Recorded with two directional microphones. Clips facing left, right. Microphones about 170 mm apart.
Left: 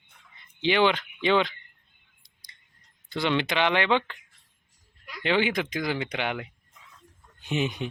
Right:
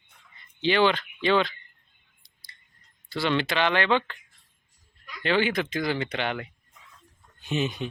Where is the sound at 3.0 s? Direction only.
20° left (ahead or behind).